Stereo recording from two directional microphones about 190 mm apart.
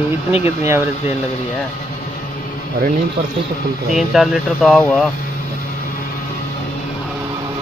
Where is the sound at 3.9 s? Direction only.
Centre (ahead or behind).